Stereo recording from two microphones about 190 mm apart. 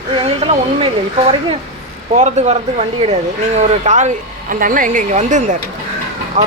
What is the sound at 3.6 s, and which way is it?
Speech, 35° right (ahead or behind).